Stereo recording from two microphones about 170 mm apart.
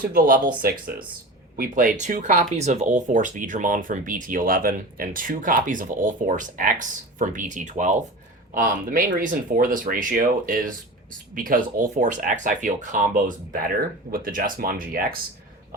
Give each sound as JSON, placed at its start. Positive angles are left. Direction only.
{"t": 0.0, "sound": "speech", "side_deg": -55}